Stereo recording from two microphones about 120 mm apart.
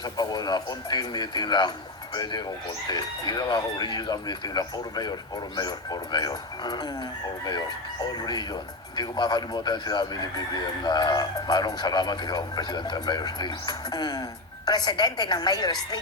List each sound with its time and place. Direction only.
0.0 s speech: 35° left (ahead or behind)